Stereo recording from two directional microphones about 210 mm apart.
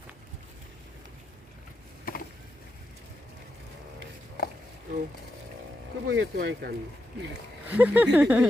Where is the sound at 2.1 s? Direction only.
40° left (ahead or behind).